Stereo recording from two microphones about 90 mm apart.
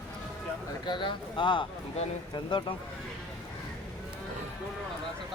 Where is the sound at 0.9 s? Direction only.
60° left (ahead or behind).